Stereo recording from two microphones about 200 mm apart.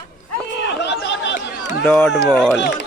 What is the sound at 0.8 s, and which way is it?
Chatter, 60° left (ahead or behind).